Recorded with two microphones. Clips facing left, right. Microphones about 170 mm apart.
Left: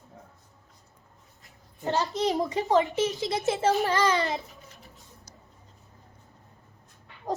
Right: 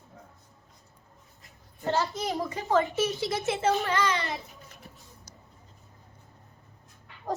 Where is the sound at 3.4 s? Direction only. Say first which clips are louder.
Left 3 dB; 35° left (ahead or behind).